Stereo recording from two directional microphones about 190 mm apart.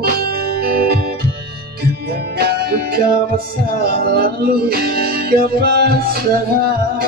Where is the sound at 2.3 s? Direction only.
55° right (ahead or behind).